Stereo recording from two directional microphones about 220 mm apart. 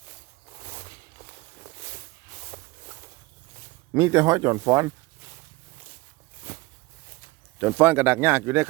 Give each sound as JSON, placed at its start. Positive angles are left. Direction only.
{"t": 2.5, "sound": "a sound", "side_deg": -10}
{"t": 3.9, "sound": "speech", "side_deg": -15}
{"t": 7.6, "sound": "speech", "side_deg": -10}